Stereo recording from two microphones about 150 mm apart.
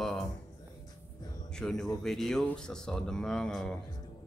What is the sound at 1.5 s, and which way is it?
Speech, 5° left (ahead or behind).